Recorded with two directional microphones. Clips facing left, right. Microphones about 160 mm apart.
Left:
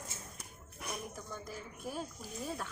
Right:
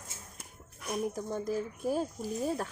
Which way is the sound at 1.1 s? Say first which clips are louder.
Right 12 dB; 40° right (ahead or behind).